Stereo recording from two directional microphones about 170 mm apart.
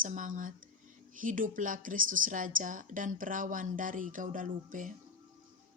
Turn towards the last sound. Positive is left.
turn(degrees=-50)  # may be behind; listen again after turning